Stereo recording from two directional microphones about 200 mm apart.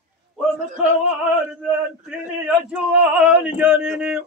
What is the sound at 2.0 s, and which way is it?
Male singing, 5° right (ahead or behind).